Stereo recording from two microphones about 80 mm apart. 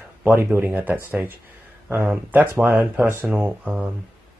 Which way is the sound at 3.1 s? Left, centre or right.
Right.